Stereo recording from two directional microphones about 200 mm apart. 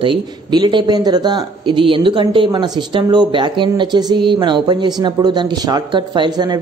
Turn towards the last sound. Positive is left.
turn(degrees=-20)  # may be behind; listen again after turning